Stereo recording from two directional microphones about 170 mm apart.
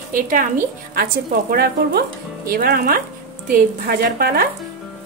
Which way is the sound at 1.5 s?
65° right (ahead or behind).